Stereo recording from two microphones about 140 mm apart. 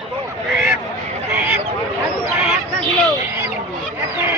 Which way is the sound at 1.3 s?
15° right (ahead or behind).